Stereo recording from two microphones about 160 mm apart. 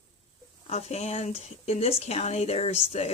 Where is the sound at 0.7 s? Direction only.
40° left (ahead or behind).